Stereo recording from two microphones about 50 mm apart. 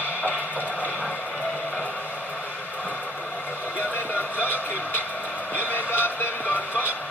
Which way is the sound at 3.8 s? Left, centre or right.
Left.